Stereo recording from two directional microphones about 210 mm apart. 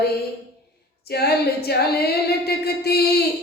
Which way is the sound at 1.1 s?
50° left (ahead or behind).